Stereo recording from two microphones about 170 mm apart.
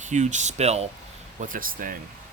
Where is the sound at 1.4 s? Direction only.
55° right (ahead or behind).